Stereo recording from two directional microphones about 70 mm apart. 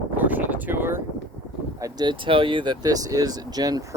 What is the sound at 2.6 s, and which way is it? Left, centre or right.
Speech, right.